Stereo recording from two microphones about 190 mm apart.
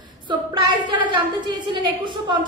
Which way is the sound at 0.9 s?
25° right (ahead or behind).